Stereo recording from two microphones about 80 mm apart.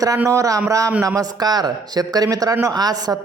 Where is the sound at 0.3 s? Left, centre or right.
Right.